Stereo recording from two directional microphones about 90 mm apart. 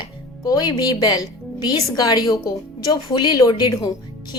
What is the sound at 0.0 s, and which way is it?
A woman's voice, 50° left (ahead or behind).